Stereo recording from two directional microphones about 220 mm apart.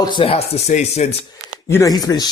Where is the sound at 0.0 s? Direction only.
20° left (ahead or behind).